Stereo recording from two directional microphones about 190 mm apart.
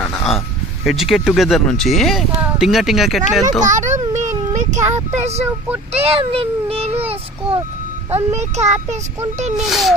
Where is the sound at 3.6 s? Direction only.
40° right (ahead or behind).